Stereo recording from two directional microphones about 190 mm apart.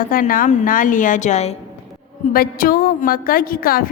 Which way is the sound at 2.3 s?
50° left (ahead or behind).